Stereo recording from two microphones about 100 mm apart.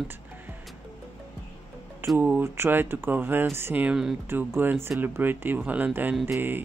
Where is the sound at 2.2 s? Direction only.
20° right (ahead or behind).